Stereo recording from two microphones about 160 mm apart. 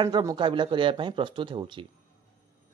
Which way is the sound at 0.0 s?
25° right (ahead or behind).